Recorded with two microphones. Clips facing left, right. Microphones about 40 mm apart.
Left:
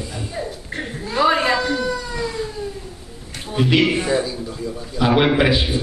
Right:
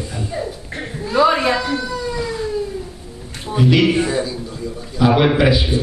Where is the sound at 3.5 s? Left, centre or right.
Centre.